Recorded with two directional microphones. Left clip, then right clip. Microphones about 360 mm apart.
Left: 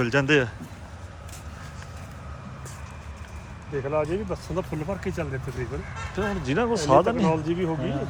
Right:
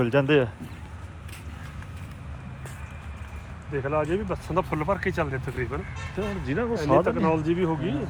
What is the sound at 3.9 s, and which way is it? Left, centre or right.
Speech, right.